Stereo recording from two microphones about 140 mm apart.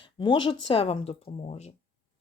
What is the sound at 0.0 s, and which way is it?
Speech, 35° left (ahead or behind).